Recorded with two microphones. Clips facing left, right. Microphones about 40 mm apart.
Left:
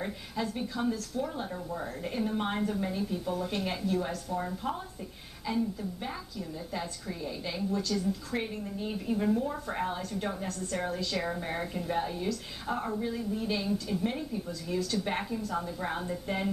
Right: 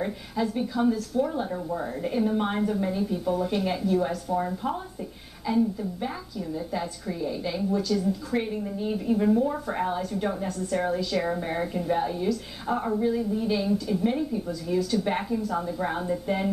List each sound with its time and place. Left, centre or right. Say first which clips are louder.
0.0 s a woman's voice: right 6 dB; centre